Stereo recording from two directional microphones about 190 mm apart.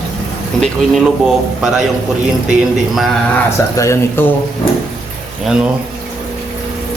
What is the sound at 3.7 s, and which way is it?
Speech, 15° left (ahead or behind).